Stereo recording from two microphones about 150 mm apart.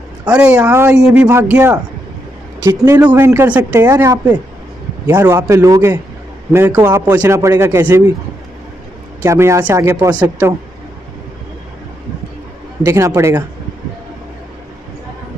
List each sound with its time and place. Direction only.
0.2 s a man's voice: 10° right (ahead or behind)
9.2 s speech: 20° right (ahead or behind)
12.8 s speech: 20° right (ahead or behind)